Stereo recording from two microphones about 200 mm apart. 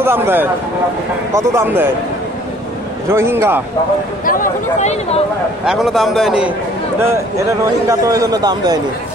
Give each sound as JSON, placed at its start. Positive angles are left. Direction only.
{"t": 0.0, "sound": "speech", "side_deg": -10}
{"t": 3.1, "sound": "speech", "side_deg": -10}
{"t": 4.3, "sound": "speech", "side_deg": 45}
{"t": 5.7, "sound": "a man's voice", "side_deg": 0}
{"t": 7.0, "sound": "a man's voice", "side_deg": -15}